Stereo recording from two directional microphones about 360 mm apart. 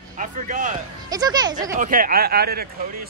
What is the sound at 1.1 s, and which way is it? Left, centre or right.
Speech, centre.